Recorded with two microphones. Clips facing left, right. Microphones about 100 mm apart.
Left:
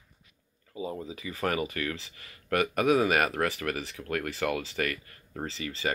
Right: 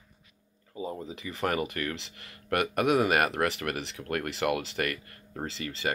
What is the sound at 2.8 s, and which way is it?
Speech, 15° right (ahead or behind).